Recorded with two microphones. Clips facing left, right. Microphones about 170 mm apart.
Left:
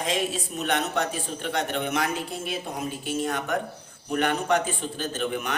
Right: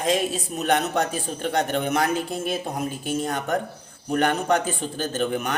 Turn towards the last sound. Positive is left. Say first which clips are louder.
# right 4 dB
turn(degrees=-45)  # may be behind; listen again after turning